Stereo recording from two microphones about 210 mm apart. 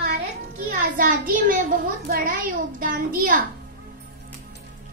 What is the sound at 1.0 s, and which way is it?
A child's voice, 40° right (ahead or behind).